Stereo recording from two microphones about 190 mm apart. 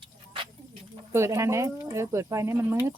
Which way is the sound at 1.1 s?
15° right (ahead or behind).